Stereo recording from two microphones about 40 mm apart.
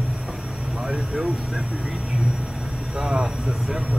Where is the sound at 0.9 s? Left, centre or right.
Right.